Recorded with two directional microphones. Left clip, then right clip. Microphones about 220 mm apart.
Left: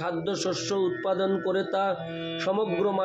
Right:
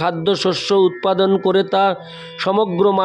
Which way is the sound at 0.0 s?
50° right (ahead or behind).